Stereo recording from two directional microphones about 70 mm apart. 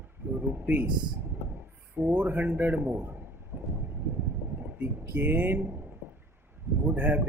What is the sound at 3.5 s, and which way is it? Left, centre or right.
Vehicle, right.